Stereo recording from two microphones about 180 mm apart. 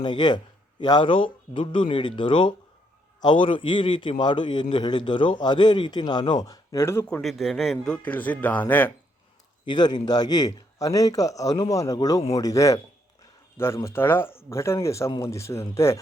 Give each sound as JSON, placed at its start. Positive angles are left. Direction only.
{"t": 0.0, "sound": "a man's voice", "side_deg": 25}
{"t": 7.2, "sound": "a man's voice", "side_deg": 0}
{"t": 9.6, "sound": "a man's voice", "side_deg": 25}